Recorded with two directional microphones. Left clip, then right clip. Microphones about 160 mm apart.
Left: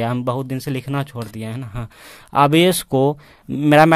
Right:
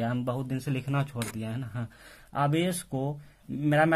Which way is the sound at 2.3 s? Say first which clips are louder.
Left 14 dB; 90° left.